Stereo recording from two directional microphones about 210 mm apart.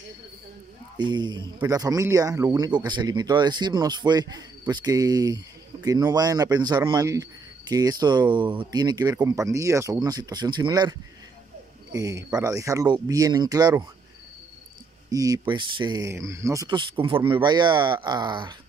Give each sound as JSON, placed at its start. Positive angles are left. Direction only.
{"t": 0.9, "sound": "speech", "side_deg": -20}
{"t": 15.0, "sound": "speech", "side_deg": -15}